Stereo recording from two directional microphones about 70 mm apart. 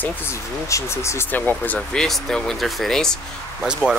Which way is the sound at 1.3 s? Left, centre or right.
Left.